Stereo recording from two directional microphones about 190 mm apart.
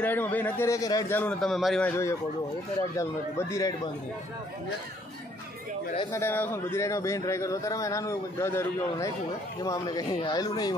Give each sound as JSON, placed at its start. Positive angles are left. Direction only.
{"t": 0.0, "sound": "a man's voice", "side_deg": 10}
{"t": 6.1, "sound": "a man's voice", "side_deg": 10}